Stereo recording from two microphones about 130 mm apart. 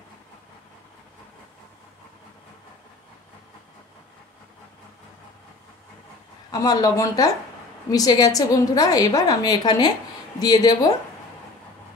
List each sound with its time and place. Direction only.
6.5 s a woman's voice: 30° left (ahead or behind)